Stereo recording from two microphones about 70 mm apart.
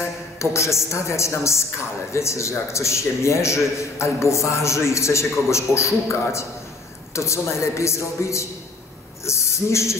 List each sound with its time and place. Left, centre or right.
0.0 s a woman's voice: left